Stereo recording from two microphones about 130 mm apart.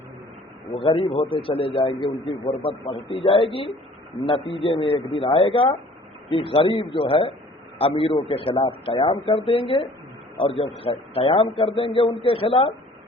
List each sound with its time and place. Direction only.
0.7 s a man's voice: 45° left (ahead or behind)